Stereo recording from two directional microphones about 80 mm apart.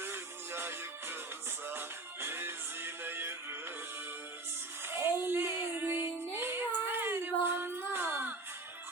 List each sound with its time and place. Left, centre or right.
0.0 s music: right
2.2 s music: right
4.9 s child singing: right
6.3 s music: right
6.9 s a sound: right